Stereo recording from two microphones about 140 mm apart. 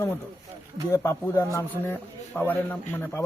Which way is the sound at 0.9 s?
20° left (ahead or behind).